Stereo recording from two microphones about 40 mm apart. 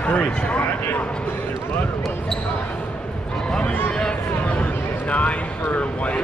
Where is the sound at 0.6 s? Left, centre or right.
Left.